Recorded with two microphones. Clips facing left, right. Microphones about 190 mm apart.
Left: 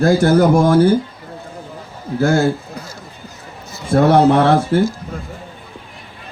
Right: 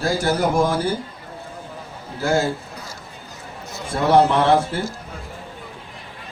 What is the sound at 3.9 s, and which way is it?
Speech, 55° left (ahead or behind).